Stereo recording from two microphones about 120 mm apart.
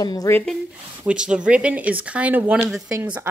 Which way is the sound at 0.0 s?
35° left (ahead or behind).